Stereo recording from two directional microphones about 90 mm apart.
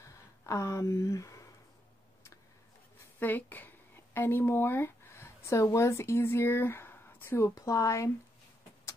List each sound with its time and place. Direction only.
0.4 s speech: 35° left (ahead or behind)
3.2 s speech: 20° left (ahead or behind); by 8.1 s 35° left (ahead or behind)